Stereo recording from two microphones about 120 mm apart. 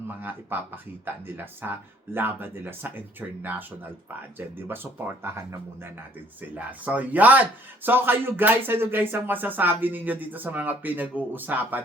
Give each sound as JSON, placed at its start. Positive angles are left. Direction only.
{"t": 0.2, "sound": "speech", "side_deg": -15}